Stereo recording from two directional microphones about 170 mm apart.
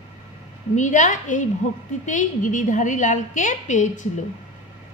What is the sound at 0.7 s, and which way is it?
A woman's voice, 45° left (ahead or behind).